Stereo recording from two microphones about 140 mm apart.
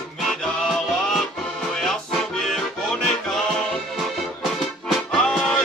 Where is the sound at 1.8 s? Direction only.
Centre (ahead or behind).